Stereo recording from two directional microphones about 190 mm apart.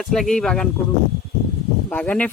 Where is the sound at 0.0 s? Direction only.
Centre (ahead or behind).